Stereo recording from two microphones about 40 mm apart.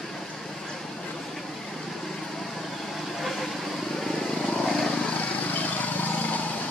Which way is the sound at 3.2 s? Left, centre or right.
Centre.